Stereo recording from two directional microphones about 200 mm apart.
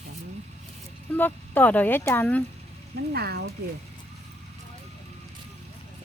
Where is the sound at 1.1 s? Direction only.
10° left (ahead or behind).